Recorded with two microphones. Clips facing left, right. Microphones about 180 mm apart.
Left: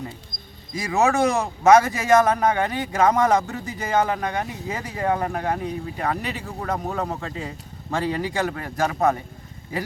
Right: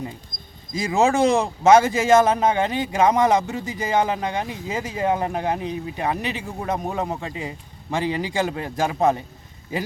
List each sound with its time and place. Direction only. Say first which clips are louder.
0.7 s speech: right 2 dB; 25° right (ahead or behind)